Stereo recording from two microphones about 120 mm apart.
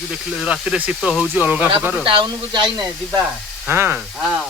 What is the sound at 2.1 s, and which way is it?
Speech, 45° right (ahead or behind).